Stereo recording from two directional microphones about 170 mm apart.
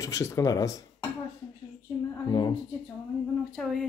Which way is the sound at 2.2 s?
25° left (ahead or behind).